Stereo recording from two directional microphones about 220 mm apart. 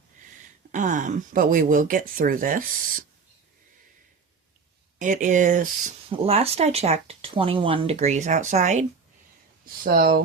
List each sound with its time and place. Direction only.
0.7 s speech: 35° right (ahead or behind)
4.9 s speech: 35° right (ahead or behind)